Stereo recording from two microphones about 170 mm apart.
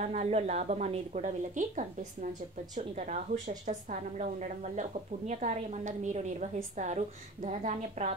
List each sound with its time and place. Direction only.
0.0 s a woman's voice: 40° right (ahead or behind)